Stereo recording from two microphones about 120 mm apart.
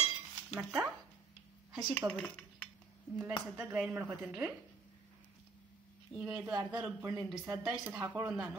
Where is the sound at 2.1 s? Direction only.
5° left (ahead or behind).